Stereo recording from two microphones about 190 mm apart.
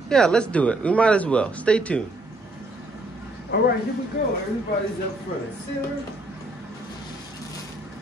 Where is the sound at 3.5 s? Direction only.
60° left (ahead or behind).